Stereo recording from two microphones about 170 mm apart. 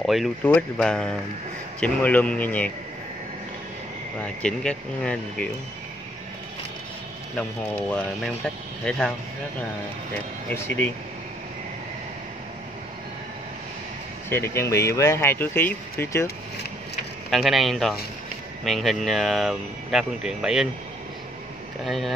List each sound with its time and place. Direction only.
0.0 s speech: centre (ahead or behind)
4.2 s speech: 5° left (ahead or behind)
8.8 s speech: 5° left (ahead or behind)
10.1 s speech: 15° left (ahead or behind)
14.3 s speech: 15° left (ahead or behind)
17.3 s speech: centre (ahead or behind)
21.8 s speech: centre (ahead or behind)